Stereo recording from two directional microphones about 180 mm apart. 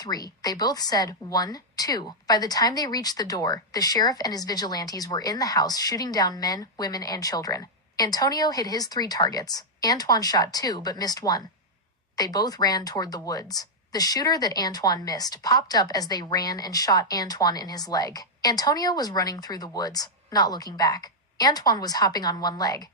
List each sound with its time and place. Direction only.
0.0 s a woman's voice: 20° left (ahead or behind)